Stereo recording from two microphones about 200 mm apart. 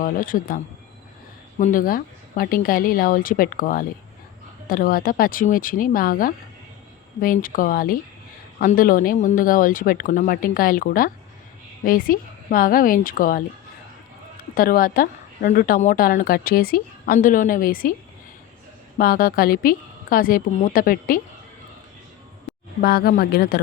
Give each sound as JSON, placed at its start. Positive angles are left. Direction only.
{"t": 0.0, "sound": "a woman's voice", "side_deg": 45}
{"t": 14.5, "sound": "a woman's voice", "side_deg": 45}
{"t": 18.9, "sound": "a woman's voice", "side_deg": 45}
{"t": 22.8, "sound": "a woman's voice", "side_deg": 50}